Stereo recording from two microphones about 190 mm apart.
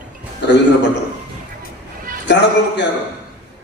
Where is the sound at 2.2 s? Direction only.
70° left (ahead or behind).